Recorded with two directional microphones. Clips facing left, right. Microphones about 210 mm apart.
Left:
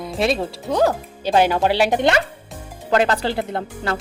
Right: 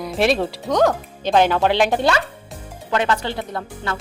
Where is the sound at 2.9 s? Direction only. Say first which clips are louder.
Left 3 dB; 35° left (ahead or behind).